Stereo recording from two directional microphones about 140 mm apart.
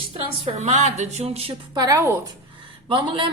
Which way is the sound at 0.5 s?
55° right (ahead or behind).